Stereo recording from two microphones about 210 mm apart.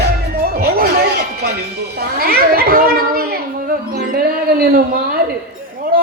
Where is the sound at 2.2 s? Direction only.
45° right (ahead or behind).